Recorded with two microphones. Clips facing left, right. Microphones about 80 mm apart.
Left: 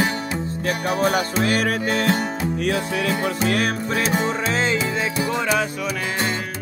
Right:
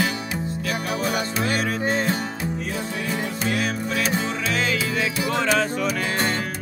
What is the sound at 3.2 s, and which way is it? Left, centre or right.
Music, left.